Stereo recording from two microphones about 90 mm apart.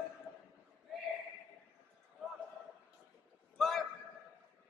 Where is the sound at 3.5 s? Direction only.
5° left (ahead or behind).